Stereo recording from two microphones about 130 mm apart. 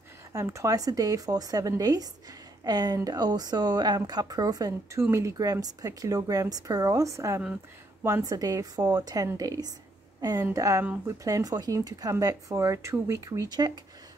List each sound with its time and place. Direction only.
0.3 s a woman's voice: 25° right (ahead or behind)